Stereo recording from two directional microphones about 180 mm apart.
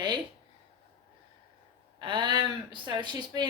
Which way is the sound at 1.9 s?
25° right (ahead or behind).